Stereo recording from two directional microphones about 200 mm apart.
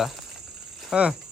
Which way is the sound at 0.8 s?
5° right (ahead or behind).